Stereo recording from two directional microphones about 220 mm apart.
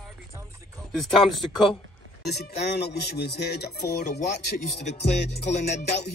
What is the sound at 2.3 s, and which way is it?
Music, 45° left (ahead or behind).